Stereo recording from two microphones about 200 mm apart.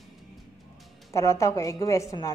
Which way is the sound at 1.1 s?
15° left (ahead or behind).